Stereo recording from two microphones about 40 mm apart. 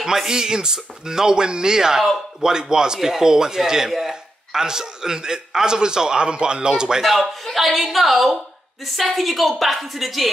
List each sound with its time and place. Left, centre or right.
0.0 s a man's voice: centre
7.0 s a woman's voice: centre